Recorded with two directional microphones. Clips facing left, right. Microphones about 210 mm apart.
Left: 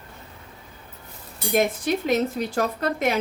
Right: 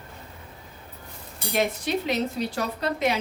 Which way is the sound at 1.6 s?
50° left (ahead or behind).